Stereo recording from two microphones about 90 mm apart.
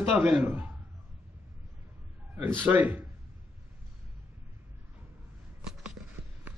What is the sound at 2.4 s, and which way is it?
Speech, 20° right (ahead or behind).